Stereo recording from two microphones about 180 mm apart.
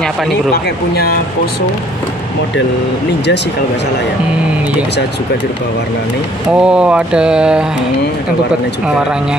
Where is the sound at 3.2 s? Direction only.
70° left (ahead or behind).